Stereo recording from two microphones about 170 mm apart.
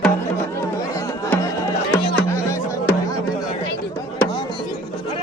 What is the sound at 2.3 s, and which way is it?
Music, 15° left (ahead or behind).